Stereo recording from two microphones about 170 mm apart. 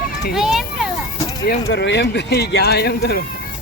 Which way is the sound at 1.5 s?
90° left.